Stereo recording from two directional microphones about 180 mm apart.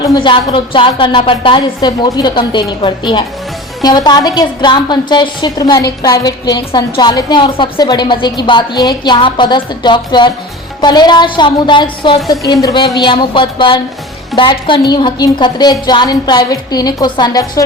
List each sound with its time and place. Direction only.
0.0 s a woman's voice: 25° left (ahead or behind)